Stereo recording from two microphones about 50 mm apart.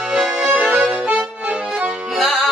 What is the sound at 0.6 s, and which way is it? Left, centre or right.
Music, right.